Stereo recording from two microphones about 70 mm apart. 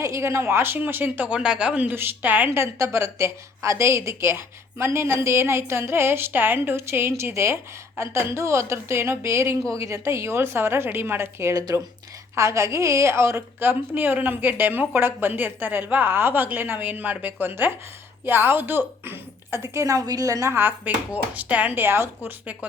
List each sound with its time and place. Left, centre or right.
0.0 s a woman's voice: right; by 1.9 s centre
1.9 s a woman's voice: right
11.5 s speech: right
12.4 s a woman's voice: right
20.6 s a woman's voice: right